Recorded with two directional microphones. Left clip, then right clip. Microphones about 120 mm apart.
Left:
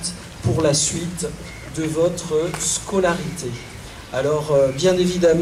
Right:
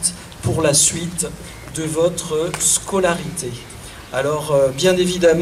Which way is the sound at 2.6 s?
30° right (ahead or behind).